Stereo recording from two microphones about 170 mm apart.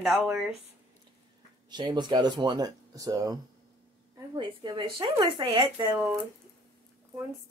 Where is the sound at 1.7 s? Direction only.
25° right (ahead or behind).